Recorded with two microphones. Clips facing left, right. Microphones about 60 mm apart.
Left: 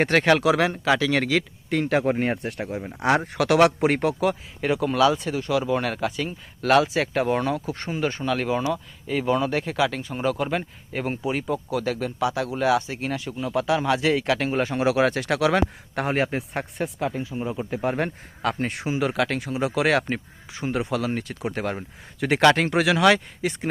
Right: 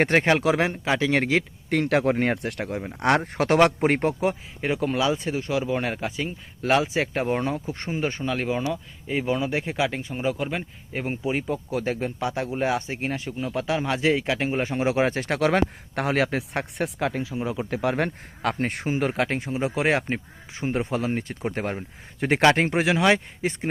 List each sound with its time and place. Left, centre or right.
0.1 s speech: right
1.7 s speech: right
3.3 s speech: right
10.2 s speech: centre
11.7 s speech: right
16.0 s speech: right
17.8 s speech: right